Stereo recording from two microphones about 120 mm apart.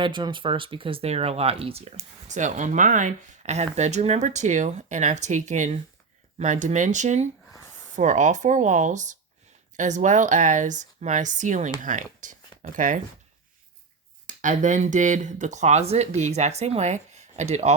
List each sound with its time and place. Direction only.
0.0 s speech: 40° right (ahead or behind)
2.2 s speech: 90° right
14.3 s speech: 90° right; by 17.7 s 70° right (ahead or behind)